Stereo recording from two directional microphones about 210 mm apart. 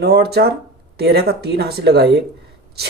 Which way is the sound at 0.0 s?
50° right (ahead or behind).